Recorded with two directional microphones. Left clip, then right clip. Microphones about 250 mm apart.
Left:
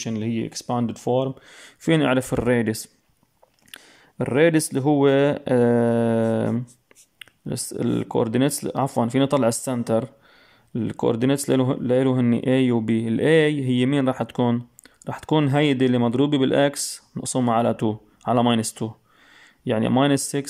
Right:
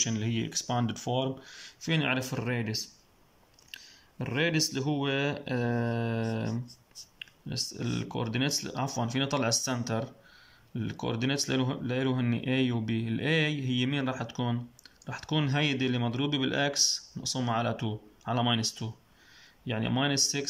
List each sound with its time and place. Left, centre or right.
0.0 s speech: centre
7.2 s a sound: left
7.7 s speech: left